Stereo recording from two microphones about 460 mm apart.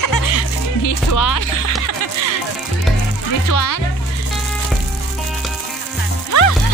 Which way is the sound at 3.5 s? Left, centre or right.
Left.